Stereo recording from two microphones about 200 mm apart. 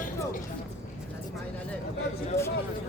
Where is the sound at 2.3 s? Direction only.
30° left (ahead or behind).